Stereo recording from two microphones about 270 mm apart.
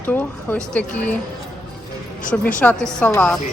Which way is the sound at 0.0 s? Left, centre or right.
Centre.